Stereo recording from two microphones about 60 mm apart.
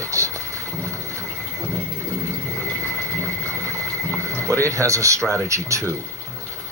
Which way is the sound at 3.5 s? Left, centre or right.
Right.